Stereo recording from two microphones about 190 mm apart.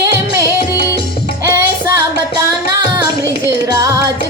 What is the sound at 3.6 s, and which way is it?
Music, 20° right (ahead or behind).